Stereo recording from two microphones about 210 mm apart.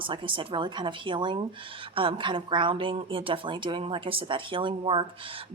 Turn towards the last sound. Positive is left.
turn(degrees=-25)  # may be behind; listen again after turning